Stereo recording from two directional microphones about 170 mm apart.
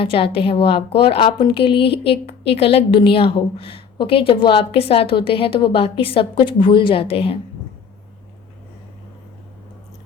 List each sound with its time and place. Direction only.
0.0 s a woman's voice: 35° left (ahead or behind)